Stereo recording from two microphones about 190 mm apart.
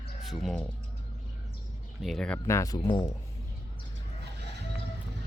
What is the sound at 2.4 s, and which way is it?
Speech, 15° left (ahead or behind).